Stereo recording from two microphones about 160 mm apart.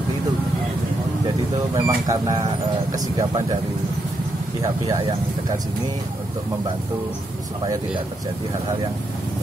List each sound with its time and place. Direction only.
1.8 s speech: 25° right (ahead or behind)
4.6 s speech: 20° right (ahead or behind)